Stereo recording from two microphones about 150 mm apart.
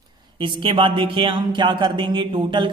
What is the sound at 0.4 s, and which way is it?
Speech, 35° right (ahead or behind).